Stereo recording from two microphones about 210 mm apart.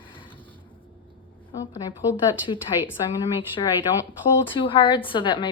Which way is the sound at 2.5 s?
25° left (ahead or behind).